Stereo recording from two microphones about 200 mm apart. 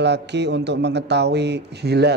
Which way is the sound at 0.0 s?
60° right (ahead or behind).